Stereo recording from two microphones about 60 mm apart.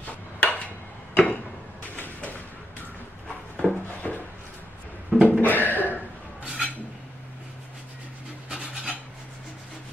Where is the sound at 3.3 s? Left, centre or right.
Centre.